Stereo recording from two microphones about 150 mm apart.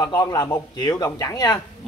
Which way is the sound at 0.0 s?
25° left (ahead or behind).